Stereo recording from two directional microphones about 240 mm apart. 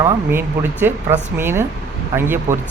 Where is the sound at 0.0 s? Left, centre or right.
Centre.